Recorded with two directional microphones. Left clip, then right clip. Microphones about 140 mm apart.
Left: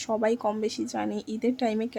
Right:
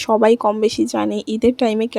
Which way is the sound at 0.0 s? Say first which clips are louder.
Right 12 dB; 45° right (ahead or behind).